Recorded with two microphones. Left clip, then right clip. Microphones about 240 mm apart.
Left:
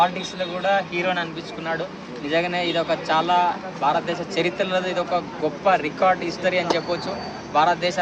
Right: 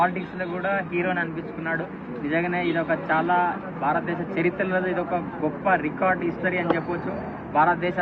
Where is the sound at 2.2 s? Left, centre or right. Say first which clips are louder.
Left 2 dB; left.